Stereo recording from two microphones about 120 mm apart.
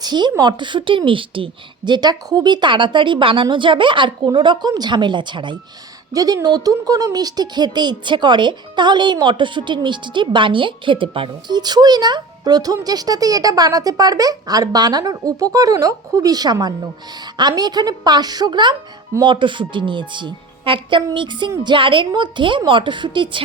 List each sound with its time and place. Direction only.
0.0 s speech: 35° right (ahead or behind)